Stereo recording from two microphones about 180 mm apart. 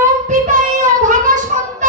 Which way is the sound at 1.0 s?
45° right (ahead or behind).